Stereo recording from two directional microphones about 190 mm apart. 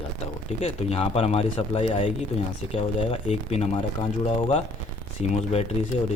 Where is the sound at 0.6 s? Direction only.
30° left (ahead or behind).